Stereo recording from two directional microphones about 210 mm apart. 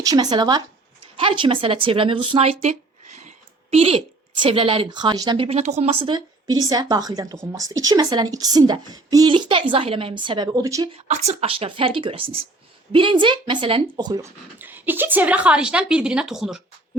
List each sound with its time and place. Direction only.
0.0 s a woman's voice: 20° right (ahead or behind)
3.2 s a sound: 30° right (ahead or behind)
4.4 s a woman's voice: 25° right (ahead or behind)
10.9 s a woman's voice: 30° right (ahead or behind); by 16.6 s centre (ahead or behind)